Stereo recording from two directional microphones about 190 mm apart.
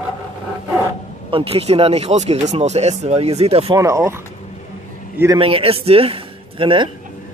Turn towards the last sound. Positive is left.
turn(degrees=-25)  # may be behind; listen again after turning